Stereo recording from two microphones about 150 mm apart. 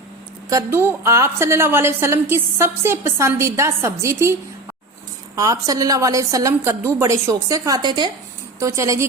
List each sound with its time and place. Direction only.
0.5 s a woman's voice: 15° right (ahead or behind)
5.4 s a woman's voice: 20° right (ahead or behind)